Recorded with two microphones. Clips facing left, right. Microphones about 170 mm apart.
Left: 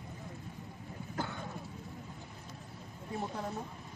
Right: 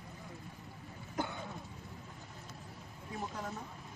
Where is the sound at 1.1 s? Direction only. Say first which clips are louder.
Right 1 dB; 15° right (ahead or behind).